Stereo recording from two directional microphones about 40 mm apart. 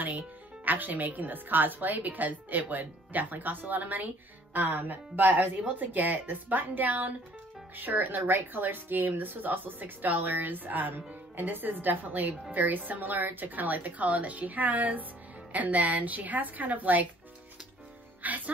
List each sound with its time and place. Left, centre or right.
0.7 s a woman's voice: right
18.2 s music: right